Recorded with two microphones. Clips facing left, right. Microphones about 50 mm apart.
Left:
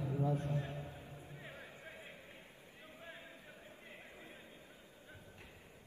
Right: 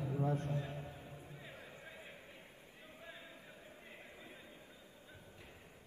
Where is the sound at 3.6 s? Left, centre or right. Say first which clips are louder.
Even; centre.